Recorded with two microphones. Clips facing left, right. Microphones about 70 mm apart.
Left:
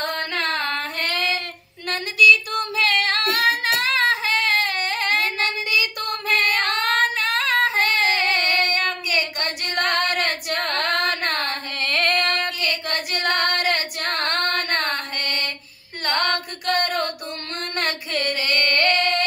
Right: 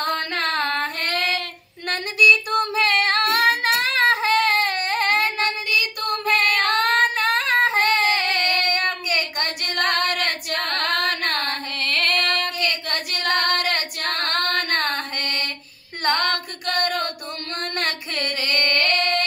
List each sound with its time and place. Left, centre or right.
0.3 s female singing: right
4.0 s child singing: right
8.3 s singing: left
8.6 s child singing: right
10.0 s female singing: left
16.7 s a sound: left
18.7 s singing: left